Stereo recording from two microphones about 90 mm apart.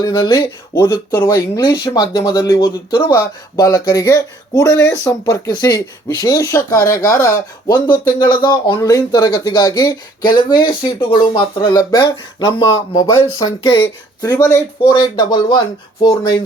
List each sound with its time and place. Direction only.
0.0 s speech: 45° left (ahead or behind)
6.4 s speech: 35° left (ahead or behind)
7.7 s speech: 55° left (ahead or behind)
8.8 s speech: 40° left (ahead or behind); by 11.7 s 60° left (ahead or behind)
11.7 s speech: 45° left (ahead or behind)
14.3 s speech: 30° left (ahead or behind)
14.8 s speech: 50° left (ahead or behind)